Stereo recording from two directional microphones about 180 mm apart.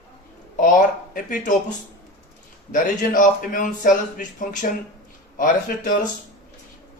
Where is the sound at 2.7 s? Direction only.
50° left (ahead or behind).